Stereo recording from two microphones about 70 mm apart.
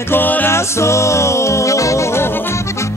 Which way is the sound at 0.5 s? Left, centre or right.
Left.